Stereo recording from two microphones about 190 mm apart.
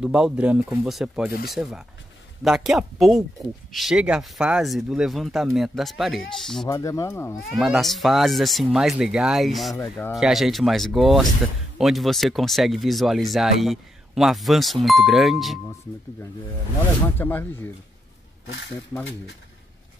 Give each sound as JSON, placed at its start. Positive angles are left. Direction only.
{"t": 0.0, "sound": "speech", "side_deg": -5}
{"t": 6.7, "sound": "speech", "side_deg": 15}
{"t": 7.3, "sound": "speech", "side_deg": 0}
{"t": 17.0, "sound": "speech", "side_deg": 10}